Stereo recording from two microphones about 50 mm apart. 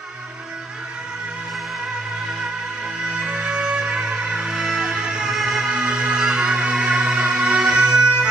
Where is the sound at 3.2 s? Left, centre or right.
Centre.